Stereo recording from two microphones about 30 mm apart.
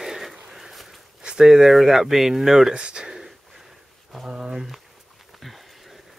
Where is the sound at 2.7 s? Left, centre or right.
Right.